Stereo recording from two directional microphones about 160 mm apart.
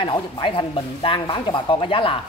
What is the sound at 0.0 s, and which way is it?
A man's voice, 35° left (ahead or behind).